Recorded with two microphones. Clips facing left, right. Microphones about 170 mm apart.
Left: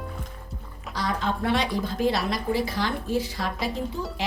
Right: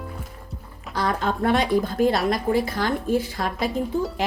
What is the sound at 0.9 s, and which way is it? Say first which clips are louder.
A woman's voice: right 4 dB; 50° right (ahead or behind).